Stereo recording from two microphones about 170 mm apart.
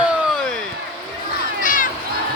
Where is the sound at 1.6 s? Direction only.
50° left (ahead or behind).